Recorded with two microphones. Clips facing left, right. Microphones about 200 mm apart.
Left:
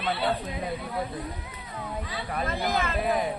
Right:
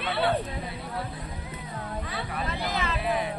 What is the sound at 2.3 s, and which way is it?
Speech, 45° left (ahead or behind).